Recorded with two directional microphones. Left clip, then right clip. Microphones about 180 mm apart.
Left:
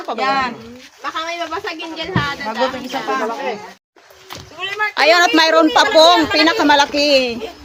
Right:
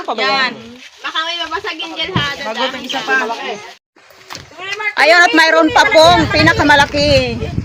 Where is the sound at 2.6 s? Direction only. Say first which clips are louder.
Even; 35° left (ahead or behind).